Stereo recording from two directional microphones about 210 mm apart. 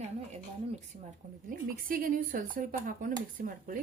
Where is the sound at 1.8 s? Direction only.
40° right (ahead or behind).